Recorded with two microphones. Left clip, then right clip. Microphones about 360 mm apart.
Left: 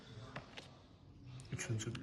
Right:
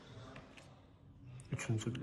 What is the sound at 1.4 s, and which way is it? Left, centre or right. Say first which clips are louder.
Speech: right 2 dB; centre.